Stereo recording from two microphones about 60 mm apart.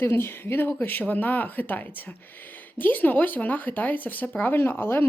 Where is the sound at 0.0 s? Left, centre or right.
Left.